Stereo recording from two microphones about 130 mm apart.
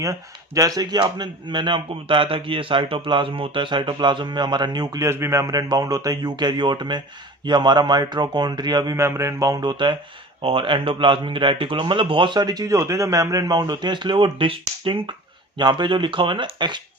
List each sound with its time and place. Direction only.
0.0 s speech: 25° right (ahead or behind)